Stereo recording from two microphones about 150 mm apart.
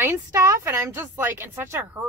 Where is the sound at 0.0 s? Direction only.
20° right (ahead or behind).